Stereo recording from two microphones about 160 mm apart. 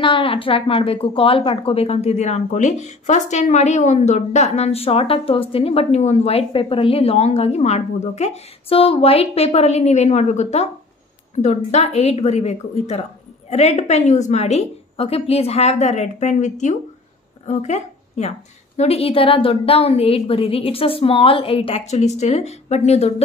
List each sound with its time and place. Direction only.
0.0 s a woman's voice: 35° left (ahead or behind)